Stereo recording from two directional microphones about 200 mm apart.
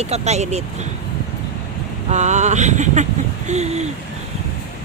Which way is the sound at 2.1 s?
35° right (ahead or behind).